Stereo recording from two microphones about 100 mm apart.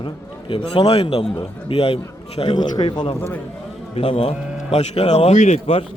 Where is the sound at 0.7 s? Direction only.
70° left (ahead or behind).